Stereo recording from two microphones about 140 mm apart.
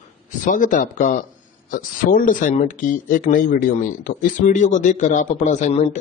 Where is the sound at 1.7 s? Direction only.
80° left.